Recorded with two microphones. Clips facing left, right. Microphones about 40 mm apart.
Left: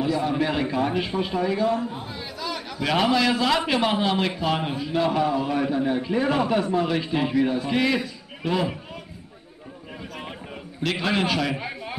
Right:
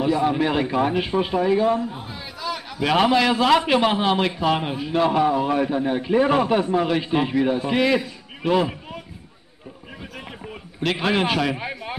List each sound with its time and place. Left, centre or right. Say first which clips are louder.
0.0 s a man's voice: right 3 dB; right
2.0 s a sound: left 1 dB; centre
2.8 s a man's voice: right 3 dB; right
7.8 s a man's voice: right 3 dB; centre
10.8 s a man's voice: right 3 dB; right